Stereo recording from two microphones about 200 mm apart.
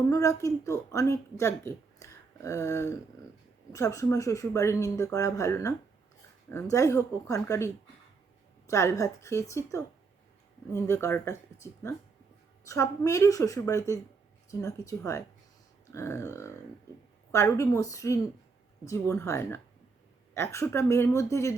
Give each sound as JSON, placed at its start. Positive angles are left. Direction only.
{"t": 0.1, "sound": "speech", "side_deg": 15}